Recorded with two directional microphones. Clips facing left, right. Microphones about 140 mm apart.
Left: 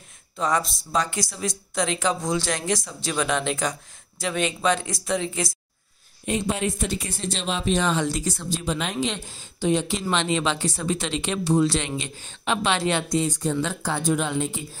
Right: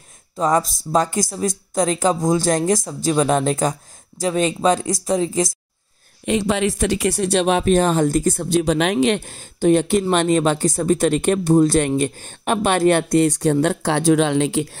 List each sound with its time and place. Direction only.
0.4 s speech: 45° right (ahead or behind)
6.2 s speech: 90° right; by 8.9 s 75° right (ahead or behind)
9.0 s speech: 60° right (ahead or behind); by 14.8 s 85° right